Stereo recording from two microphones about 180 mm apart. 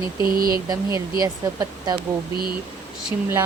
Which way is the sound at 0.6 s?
20° right (ahead or behind).